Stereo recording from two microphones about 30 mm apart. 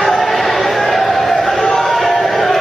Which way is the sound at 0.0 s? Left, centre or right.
Centre.